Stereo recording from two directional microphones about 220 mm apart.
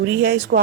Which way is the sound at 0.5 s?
45° right (ahead or behind).